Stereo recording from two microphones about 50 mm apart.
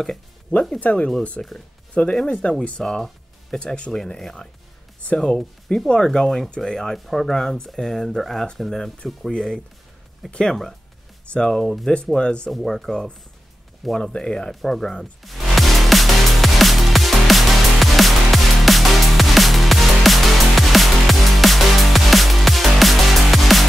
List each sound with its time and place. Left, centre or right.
0.7 s speech: left
2.8 s speech: centre
11.6 s speech: centre
12.2 s speech: centre
12.4 s speech: centre
13.9 s speech: centre
14.5 s speech: centre
14.8 s speech: centre
15.2 s music: centre